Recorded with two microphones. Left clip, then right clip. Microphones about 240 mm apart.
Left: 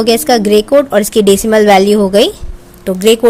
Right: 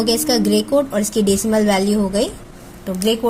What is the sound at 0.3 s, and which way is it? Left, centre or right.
A woman's voice, left.